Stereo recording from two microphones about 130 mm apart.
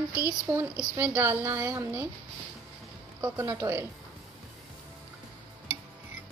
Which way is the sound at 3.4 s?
20° right (ahead or behind).